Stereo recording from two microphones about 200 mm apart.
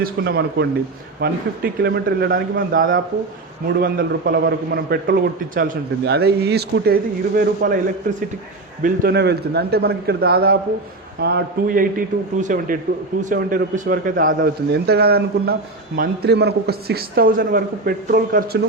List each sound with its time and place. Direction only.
0.0 s a man's voice: 50° right (ahead or behind)
8.8 s a man's voice: 50° right (ahead or behind)
14.7 s a man's voice: 55° right (ahead or behind)